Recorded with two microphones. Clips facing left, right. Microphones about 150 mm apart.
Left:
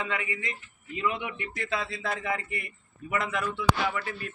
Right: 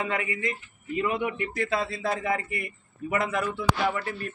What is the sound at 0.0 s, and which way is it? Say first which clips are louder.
Speech: right 4 dB; 40° right (ahead or behind).